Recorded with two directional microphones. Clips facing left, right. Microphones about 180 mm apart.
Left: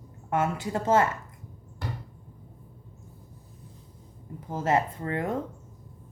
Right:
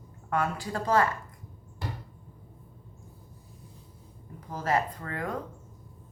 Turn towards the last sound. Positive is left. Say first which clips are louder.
# left 4 dB
turn(degrees=25)  # may be behind; listen again after turning